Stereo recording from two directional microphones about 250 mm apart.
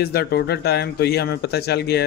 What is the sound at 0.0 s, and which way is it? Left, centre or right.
Speech, left.